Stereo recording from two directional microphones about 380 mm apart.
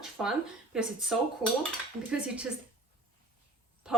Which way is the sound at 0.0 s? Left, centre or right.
Centre.